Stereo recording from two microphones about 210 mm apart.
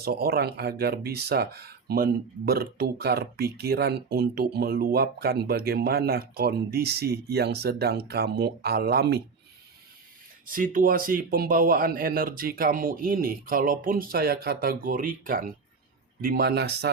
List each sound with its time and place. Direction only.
0.0 s speech: 45° right (ahead or behind)
10.4 s speech: 40° right (ahead or behind)